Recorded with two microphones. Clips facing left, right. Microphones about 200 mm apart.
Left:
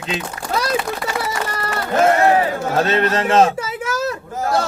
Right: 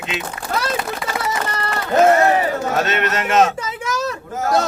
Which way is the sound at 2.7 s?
30° left (ahead or behind).